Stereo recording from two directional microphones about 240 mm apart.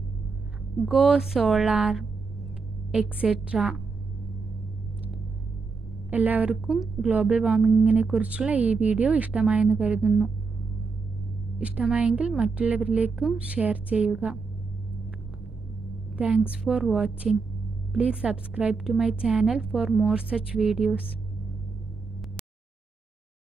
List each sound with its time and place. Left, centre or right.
0.8 s a woman's voice: centre
6.0 s a woman's voice: centre
11.5 s a woman's voice: centre
16.2 s a woman's voice: centre